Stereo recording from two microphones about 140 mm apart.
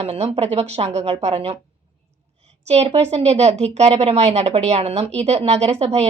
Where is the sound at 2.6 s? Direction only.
50° right (ahead or behind).